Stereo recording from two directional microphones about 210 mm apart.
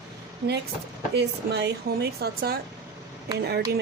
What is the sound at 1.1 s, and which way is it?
Speech, 55° right (ahead or behind).